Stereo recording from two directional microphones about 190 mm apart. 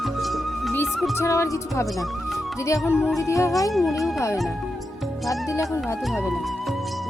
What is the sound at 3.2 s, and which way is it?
Music, 15° left (ahead or behind).